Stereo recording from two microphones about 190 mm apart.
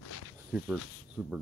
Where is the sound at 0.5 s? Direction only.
5° right (ahead or behind).